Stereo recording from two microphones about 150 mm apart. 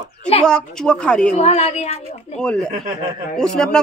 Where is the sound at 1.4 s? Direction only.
45° left (ahead or behind).